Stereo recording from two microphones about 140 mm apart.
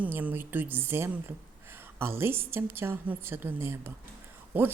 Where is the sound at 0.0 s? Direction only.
10° right (ahead or behind).